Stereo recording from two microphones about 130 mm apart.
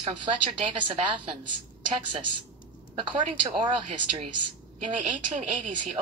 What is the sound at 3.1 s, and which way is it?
A woman's voice, 40° right (ahead or behind).